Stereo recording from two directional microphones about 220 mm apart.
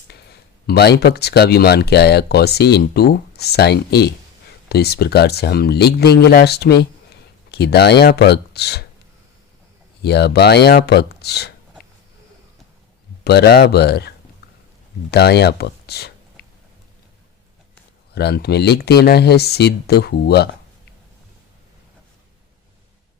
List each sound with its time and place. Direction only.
0.1 s speech: 50° left (ahead or behind)
10.0 s speech: 50° left (ahead or behind)
13.2 s speech: 45° left (ahead or behind)
15.1 s speech: 45° left (ahead or behind)
18.1 s speech: 45° left (ahead or behind)